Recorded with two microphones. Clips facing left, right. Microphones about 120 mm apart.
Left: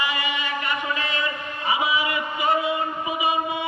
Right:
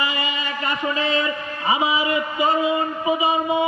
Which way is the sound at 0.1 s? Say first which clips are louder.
Right 1 dB; 30° right (ahead or behind).